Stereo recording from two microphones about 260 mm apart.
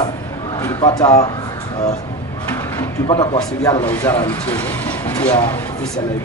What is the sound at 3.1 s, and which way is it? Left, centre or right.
Speech, centre.